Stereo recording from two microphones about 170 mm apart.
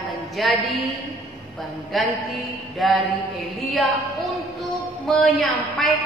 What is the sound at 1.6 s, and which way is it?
Speech, centre (ahead or behind).